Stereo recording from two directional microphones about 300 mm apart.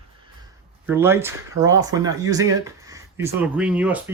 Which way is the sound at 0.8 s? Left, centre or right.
Centre.